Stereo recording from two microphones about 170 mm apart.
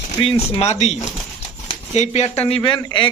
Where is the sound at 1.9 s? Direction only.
40° left (ahead or behind).